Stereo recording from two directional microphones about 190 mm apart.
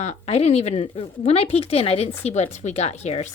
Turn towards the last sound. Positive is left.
turn(degrees=35)  # may be behind; listen again after turning